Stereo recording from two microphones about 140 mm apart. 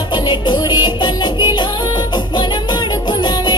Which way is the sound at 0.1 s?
35° left (ahead or behind).